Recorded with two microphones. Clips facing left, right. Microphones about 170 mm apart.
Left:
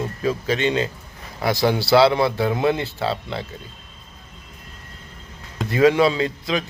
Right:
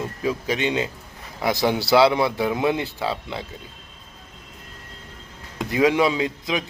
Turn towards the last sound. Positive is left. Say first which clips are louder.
# left 1 dB
turn(degrees=-15)  # may be behind; listen again after turning